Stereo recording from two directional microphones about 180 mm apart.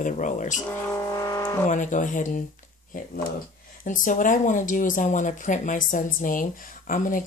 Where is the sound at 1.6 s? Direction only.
45° left (ahead or behind).